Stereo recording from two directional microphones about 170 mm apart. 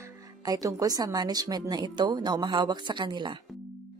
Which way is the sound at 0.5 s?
20° right (ahead or behind).